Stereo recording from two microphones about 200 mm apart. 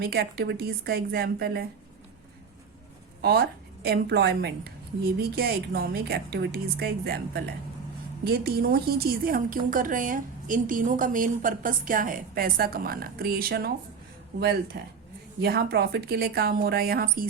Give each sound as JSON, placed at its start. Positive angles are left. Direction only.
{"t": 0.0, "sound": "a woman's voice", "side_deg": -55}
{"t": 3.2, "sound": "a woman's voice", "side_deg": -50}